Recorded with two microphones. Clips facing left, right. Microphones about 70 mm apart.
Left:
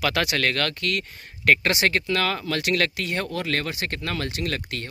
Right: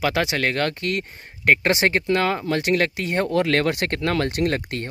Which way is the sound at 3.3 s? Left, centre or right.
Right.